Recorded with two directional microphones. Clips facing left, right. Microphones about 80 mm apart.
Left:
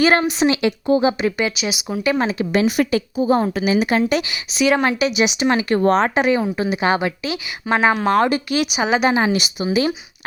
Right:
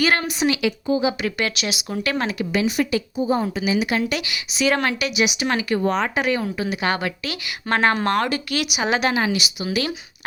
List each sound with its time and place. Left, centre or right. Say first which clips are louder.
0.0 s speech: left 5 dB; left
0.9 s a woman's voice: left 5 dB; left
1.2 s speech: left 4 dB; centre
2.4 s a woman's voice: left 4 dB; left
2.6 s a woman's voice: left 2 dB; left
3.2 s a woman's voice: left 5 dB; left
3.4 s a woman's voice: left 4 dB; left
5.6 s a woman's voice: left 6 dB; left
6.0 s speech: left 5 dB; left
7.6 s speech: left 2 dB; centre
8.1 s speech: left 5 dB; left
8.8 s speech: left 3 dB; centre
9.1 s a woman's voice: left 4 dB; left
9.6 s speech: left 6 dB; left